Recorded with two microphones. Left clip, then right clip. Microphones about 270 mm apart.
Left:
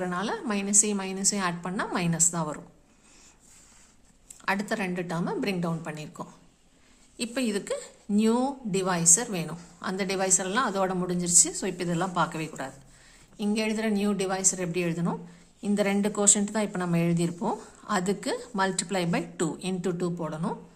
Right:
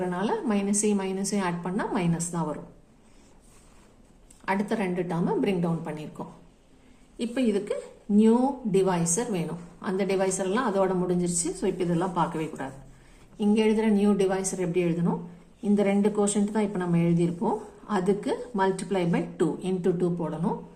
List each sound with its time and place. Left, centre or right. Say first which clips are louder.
0.0 s a woman's voice: right 2 dB; left
4.4 s a woman's voice: right 1 dB; left
7.5 s a woman's voice: right 2 dB; left